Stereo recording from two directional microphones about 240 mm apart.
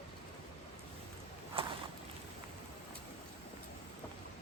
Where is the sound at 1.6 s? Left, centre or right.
Right.